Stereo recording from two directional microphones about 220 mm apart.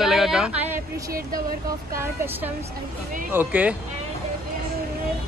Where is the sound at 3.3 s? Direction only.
5° right (ahead or behind).